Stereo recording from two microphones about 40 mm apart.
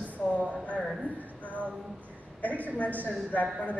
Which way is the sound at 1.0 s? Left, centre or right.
Left.